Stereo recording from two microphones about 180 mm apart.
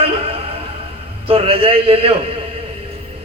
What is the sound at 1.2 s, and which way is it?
Speech, 30° right (ahead or behind).